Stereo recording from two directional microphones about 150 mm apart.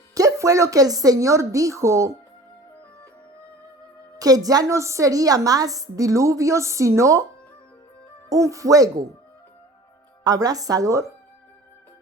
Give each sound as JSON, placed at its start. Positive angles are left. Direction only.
{"t": 0.1, "sound": "a woman's voice", "side_deg": -20}
{"t": 4.2, "sound": "a woman's voice", "side_deg": -25}
{"t": 8.3, "sound": "a woman's voice", "side_deg": -20}
{"t": 10.2, "sound": "a woman's voice", "side_deg": -25}